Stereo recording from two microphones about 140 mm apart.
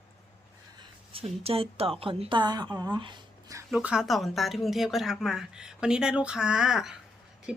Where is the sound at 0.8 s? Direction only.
40° right (ahead or behind).